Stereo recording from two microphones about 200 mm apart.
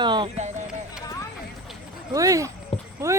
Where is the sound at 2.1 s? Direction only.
15° right (ahead or behind).